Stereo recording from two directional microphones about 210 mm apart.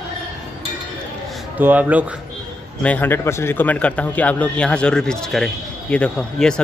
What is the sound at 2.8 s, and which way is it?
Speech, 10° left (ahead or behind).